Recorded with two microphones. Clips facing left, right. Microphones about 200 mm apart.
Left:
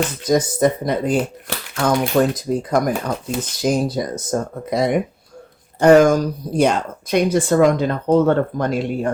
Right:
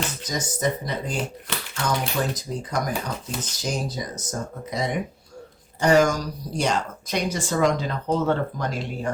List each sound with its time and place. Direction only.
0.2 s a woman's voice: 55° left (ahead or behind)